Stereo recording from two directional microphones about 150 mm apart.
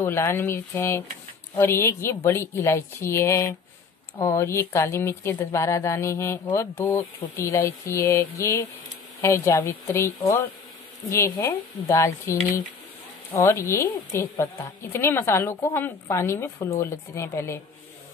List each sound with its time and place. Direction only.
0.0 s a woman's voice: 15° left (ahead or behind)